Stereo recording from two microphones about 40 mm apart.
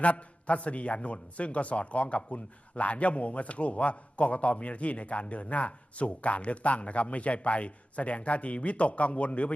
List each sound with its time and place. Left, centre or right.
0.0 s a man's voice: left